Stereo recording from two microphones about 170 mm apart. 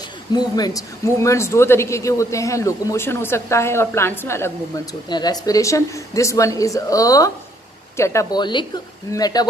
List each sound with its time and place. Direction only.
0.3 s a woman's voice: 25° left (ahead or behind)